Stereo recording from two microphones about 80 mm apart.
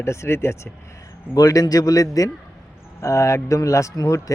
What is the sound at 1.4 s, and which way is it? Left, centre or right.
Speech, left.